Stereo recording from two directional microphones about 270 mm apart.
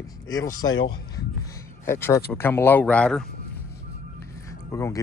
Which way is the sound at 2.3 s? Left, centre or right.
Centre.